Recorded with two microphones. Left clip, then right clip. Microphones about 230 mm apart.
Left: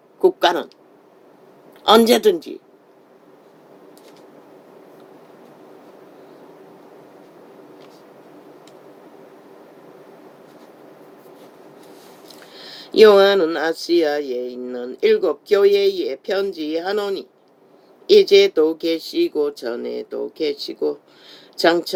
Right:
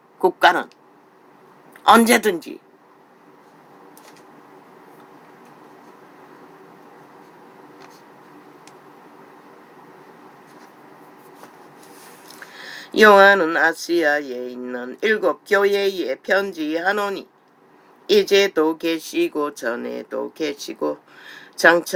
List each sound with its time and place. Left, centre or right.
0.3 s speech: right
1.8 s speech: right
12.9 s speech: right
14.3 s speech: right
14.6 s speech: right